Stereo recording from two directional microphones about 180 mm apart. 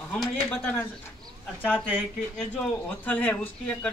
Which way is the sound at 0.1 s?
5° left (ahead or behind).